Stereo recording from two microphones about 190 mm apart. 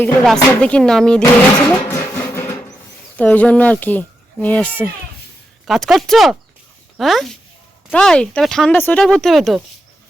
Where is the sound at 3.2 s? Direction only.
5° left (ahead or behind).